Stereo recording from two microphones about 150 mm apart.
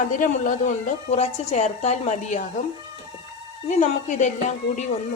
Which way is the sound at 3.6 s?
55° left (ahead or behind).